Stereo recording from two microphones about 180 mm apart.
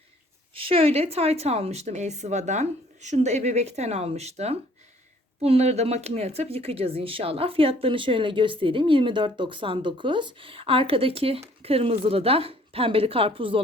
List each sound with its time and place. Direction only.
0.5 s speech: 30° right (ahead or behind)